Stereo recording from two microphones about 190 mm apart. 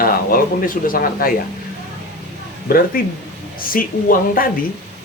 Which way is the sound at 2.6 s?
50° left (ahead or behind).